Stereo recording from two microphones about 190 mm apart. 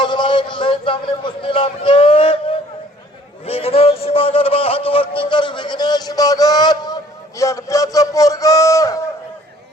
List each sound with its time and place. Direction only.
0.0 s a man's voice: 25° left (ahead or behind)